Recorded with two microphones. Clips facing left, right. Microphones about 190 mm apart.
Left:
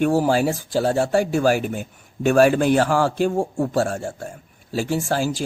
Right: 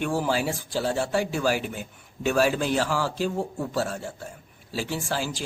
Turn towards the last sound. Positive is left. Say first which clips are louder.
# left 7 dB
turn(degrees=45)  # may be behind; listen again after turning